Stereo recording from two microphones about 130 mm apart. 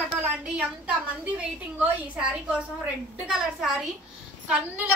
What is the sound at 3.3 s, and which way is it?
Speech, 5° right (ahead or behind).